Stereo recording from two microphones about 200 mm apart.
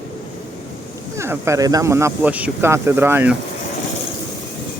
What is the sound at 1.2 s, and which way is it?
Speech, 15° right (ahead or behind).